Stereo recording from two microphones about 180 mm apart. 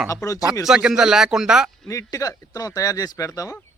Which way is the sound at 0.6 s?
5° right (ahead or behind).